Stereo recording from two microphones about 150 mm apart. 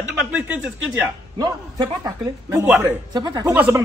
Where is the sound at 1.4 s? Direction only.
25° right (ahead or behind).